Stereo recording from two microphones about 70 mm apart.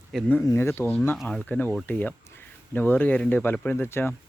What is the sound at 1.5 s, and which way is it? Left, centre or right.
Speech, left.